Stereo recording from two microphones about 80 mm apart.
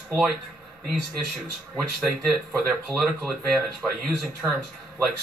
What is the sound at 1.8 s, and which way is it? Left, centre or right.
Speech, centre.